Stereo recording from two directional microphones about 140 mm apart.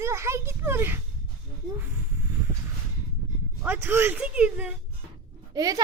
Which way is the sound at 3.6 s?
15° right (ahead or behind).